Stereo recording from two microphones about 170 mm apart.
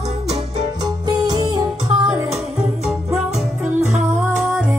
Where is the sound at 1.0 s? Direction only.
25° right (ahead or behind).